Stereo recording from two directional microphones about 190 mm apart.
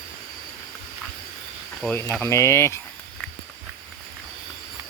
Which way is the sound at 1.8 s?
10° left (ahead or behind).